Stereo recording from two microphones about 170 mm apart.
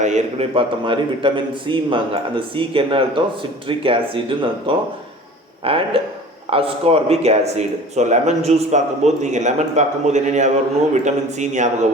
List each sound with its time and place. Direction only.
0.0 s a man's voice: 40° right (ahead or behind)